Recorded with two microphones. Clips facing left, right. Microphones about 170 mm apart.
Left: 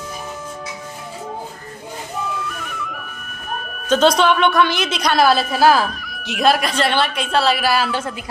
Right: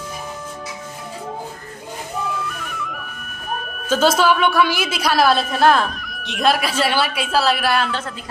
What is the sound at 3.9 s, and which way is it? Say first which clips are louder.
A woman's voice: left 2 dB; 5° right (ahead or behind).